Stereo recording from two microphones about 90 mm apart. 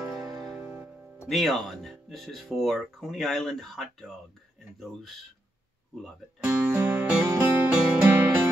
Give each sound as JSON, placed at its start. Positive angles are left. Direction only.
{"t": 0.2, "sound": "music", "side_deg": 0}
{"t": 0.6, "sound": "music", "side_deg": -20}
{"t": 1.3, "sound": "speech", "side_deg": 0}
{"t": 6.4, "sound": "music", "side_deg": -20}